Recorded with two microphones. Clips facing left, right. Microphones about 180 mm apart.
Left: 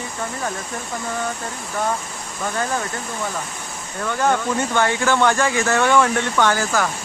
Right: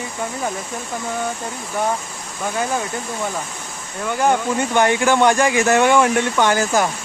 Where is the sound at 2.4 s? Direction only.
10° right (ahead or behind).